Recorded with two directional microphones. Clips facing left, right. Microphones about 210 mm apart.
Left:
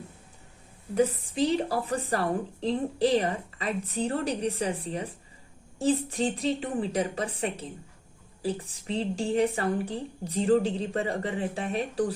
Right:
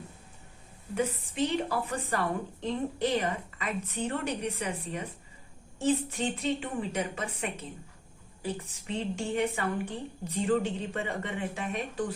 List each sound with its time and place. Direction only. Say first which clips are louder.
0.9 s a woman's voice: left 5 dB; 35° left (ahead or behind)